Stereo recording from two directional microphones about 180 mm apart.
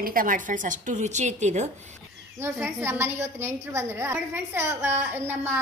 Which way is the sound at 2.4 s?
15° right (ahead or behind).